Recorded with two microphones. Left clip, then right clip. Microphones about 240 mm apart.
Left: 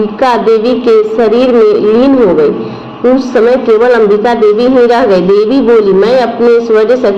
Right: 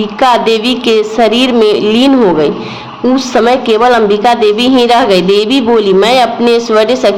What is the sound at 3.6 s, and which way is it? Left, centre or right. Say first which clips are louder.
A man's voice: left 1 dB; right.